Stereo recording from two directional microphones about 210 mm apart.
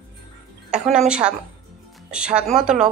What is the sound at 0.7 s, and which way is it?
Speech, 5° right (ahead or behind).